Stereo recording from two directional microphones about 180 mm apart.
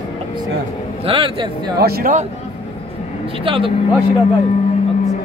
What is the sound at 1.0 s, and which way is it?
Speech, 30° right (ahead or behind).